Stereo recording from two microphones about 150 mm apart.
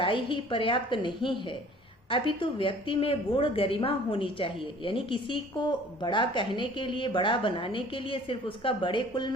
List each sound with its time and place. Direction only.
0.0 s a woman's voice: 35° left (ahead or behind)